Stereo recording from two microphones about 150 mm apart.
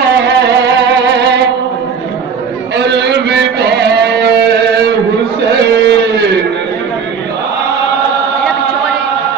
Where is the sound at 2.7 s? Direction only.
90° right.